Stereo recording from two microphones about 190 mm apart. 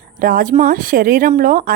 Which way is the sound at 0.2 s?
50° right (ahead or behind).